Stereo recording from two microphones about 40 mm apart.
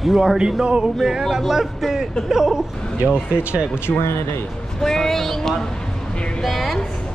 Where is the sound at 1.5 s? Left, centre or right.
Centre.